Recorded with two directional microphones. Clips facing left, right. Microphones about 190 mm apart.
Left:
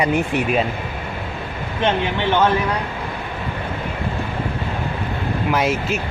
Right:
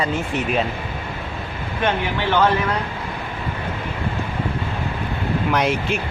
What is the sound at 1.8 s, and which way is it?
Speech, 20° left (ahead or behind).